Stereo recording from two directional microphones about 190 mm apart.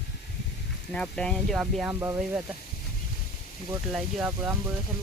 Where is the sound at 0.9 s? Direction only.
5° left (ahead or behind).